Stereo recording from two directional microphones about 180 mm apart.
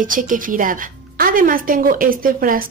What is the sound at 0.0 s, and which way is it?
A woman's voice, 50° right (ahead or behind).